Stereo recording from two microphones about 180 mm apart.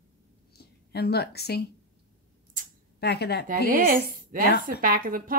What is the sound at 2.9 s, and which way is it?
Speech, 65° left (ahead or behind).